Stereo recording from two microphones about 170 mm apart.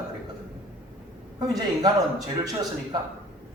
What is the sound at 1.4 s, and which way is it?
A man's voice, 25° right (ahead or behind).